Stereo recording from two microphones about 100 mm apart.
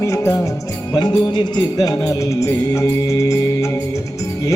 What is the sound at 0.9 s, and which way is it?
Music, 45° left (ahead or behind).